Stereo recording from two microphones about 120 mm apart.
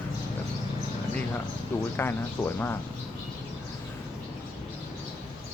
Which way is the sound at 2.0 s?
20° left (ahead or behind).